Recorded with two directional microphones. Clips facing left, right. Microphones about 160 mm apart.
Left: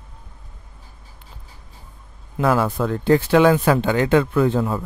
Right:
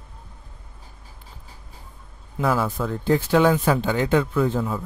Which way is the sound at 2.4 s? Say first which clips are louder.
Left 4 dB; 65° left (ahead or behind).